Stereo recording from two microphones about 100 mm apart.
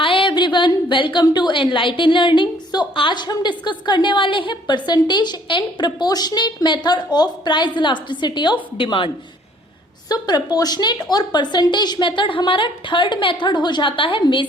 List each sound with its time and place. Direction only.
0.0 s a sound: 60° left (ahead or behind)
1.2 s a woman's voice: 45° left (ahead or behind)
10.1 s a woman's voice: 40° left (ahead or behind); by 14.4 s 60° left (ahead or behind)